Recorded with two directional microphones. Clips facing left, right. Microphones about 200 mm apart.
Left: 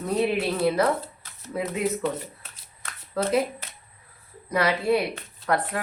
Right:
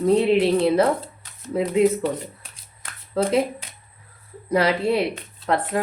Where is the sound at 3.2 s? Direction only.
25° right (ahead or behind).